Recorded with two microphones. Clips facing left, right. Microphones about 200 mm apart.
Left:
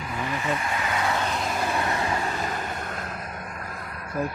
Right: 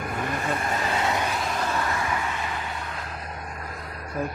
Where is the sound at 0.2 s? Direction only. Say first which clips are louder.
Left 1 dB; 50° right (ahead or behind); by 1.1 s 30° right (ahead or behind).